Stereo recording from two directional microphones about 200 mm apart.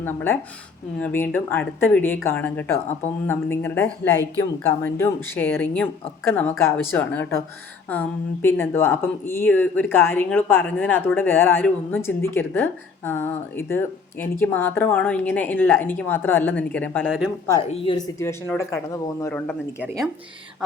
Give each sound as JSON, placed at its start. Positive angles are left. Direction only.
{"t": 0.0, "sound": "speech", "side_deg": 10}
{"t": 17.6, "sound": "speech", "side_deg": 30}
{"t": 18.5, "sound": "speech", "side_deg": 15}
{"t": 19.8, "sound": "speech", "side_deg": -15}